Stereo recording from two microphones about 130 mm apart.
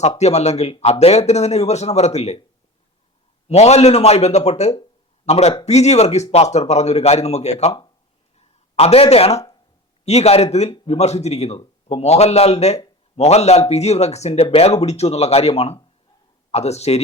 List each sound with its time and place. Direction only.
0.2 s speech: 60° left (ahead or behind)
3.5 s a man's voice: 55° left (ahead or behind)
8.4 s a sound: 50° left (ahead or behind)
10.1 s speech: 55° left (ahead or behind)